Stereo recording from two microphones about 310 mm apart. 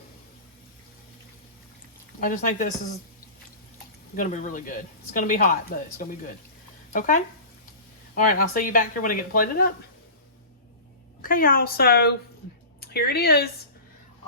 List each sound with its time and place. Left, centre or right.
2.2 s speech: left
4.1 s speech: left
8.1 s speech: left
11.2 s speech: left